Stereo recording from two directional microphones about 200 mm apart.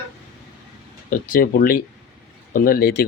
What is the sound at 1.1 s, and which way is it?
Speech, 45° left (ahead or behind).